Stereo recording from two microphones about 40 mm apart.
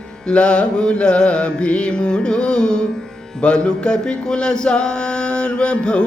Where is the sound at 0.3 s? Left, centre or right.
Left.